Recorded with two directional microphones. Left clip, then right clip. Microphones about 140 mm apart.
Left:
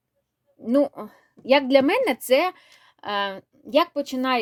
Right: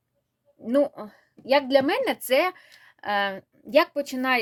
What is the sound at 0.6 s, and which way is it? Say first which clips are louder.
A woman's voice: left 1 dB; 35° left (ahead or behind).